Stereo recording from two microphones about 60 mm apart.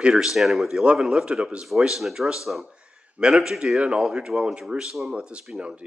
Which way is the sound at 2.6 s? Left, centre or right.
Centre.